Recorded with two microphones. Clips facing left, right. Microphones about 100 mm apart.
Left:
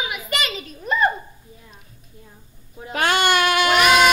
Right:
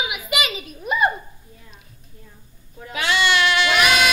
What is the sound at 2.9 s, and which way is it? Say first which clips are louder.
Child singing: left 2 dB; 50° left (ahead or behind).